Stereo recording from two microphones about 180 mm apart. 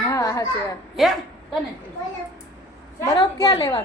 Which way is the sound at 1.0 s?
Centre (ahead or behind).